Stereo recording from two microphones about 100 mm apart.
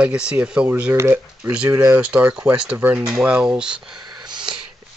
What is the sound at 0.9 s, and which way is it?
Speech, 25° right (ahead or behind).